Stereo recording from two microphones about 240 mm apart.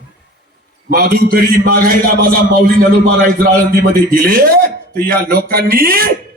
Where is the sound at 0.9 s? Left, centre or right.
Right.